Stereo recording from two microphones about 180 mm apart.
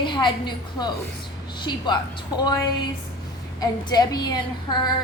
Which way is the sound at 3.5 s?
20° left (ahead or behind).